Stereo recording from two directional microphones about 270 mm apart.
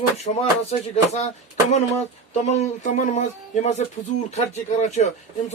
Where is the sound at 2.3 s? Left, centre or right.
Left.